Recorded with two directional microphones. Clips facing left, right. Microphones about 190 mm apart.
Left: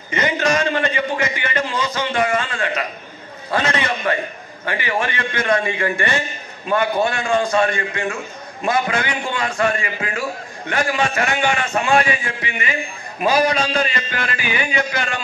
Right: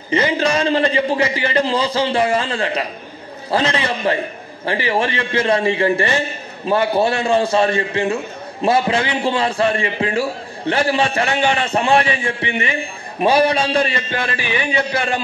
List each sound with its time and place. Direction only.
0.1 s a man's voice: 30° right (ahead or behind)